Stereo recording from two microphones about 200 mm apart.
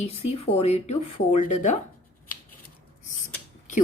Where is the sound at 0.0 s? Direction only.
30° left (ahead or behind).